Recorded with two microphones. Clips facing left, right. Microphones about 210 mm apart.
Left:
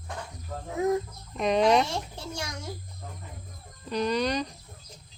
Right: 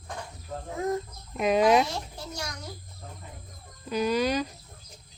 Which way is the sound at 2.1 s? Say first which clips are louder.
Left 1 dB; 25° left (ahead or behind).